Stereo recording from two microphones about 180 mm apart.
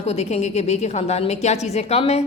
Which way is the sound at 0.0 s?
35° left (ahead or behind).